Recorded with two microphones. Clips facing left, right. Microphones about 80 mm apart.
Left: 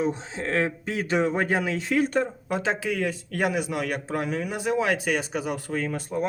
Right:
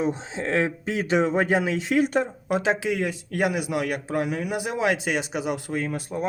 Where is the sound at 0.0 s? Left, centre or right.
Right.